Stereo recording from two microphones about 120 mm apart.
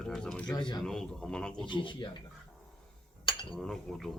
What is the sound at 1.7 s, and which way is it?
Speech, 40° left (ahead or behind).